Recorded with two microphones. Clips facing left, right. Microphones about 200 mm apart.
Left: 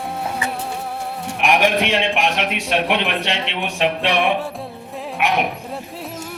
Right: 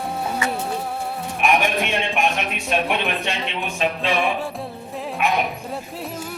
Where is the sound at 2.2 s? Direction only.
75° left (ahead or behind).